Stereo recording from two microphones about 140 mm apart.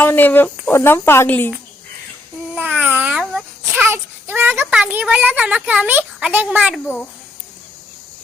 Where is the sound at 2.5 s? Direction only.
10° right (ahead or behind).